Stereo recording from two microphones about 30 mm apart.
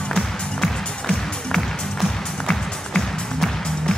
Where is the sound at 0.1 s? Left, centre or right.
Left.